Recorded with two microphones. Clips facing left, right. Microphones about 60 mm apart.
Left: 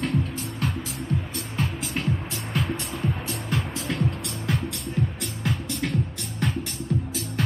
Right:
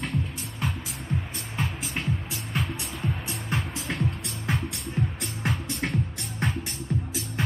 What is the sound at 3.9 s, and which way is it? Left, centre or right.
Music, right.